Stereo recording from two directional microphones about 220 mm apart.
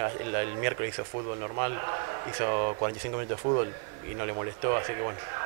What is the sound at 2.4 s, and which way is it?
Speech, 30° right (ahead or behind).